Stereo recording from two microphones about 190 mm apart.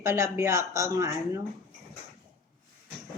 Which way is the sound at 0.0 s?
15° right (ahead or behind).